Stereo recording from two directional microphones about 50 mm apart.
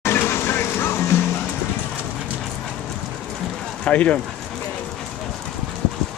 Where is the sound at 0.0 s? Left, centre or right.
Left.